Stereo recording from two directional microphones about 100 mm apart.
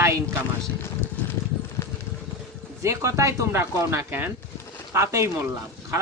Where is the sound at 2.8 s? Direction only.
30° right (ahead or behind).